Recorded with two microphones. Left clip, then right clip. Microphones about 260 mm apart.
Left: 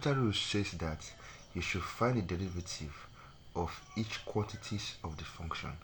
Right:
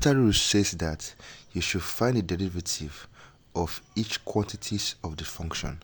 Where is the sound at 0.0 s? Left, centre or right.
Right.